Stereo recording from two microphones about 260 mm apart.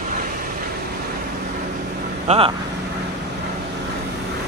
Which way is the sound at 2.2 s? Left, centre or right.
Right.